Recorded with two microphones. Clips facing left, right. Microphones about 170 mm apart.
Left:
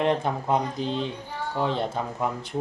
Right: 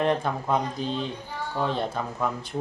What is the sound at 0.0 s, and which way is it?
Speech, 20° left (ahead or behind).